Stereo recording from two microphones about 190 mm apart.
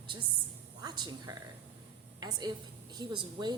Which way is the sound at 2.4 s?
20° right (ahead or behind).